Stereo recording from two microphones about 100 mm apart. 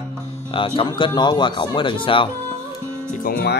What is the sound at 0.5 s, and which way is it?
Speech, 60° left (ahead or behind).